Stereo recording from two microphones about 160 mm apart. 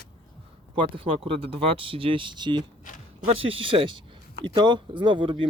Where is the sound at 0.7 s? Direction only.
35° right (ahead or behind).